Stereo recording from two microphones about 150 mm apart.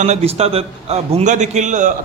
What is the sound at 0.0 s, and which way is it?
A man's voice, 45° right (ahead or behind).